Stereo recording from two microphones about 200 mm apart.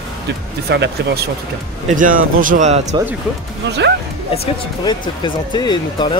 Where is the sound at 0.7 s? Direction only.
55° right (ahead or behind).